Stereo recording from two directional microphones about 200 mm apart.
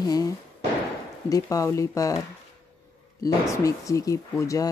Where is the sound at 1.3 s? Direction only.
15° left (ahead or behind).